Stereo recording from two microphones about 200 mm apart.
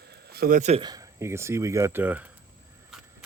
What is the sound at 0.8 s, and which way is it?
Speech, 20° right (ahead or behind).